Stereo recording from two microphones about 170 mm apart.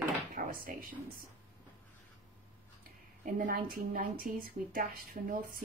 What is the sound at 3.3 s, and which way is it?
A woman's voice, 55° right (ahead or behind).